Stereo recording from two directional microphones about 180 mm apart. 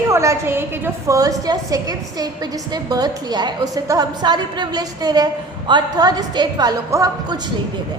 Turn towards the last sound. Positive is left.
turn(degrees=-20)  # may be behind; listen again after turning